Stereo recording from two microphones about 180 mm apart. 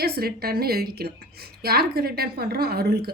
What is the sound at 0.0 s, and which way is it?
A woman's voice, 60° right (ahead or behind).